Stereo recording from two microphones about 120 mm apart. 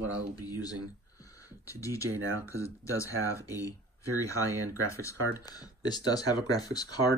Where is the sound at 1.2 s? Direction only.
25° left (ahead or behind).